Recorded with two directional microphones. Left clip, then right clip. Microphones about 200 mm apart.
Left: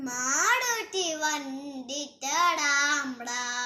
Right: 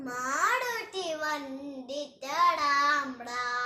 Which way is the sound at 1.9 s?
15° right (ahead or behind).